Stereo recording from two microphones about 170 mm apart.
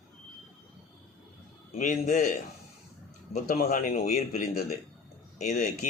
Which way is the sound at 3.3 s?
45° left (ahead or behind).